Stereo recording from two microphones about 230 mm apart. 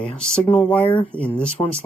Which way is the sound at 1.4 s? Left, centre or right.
Left.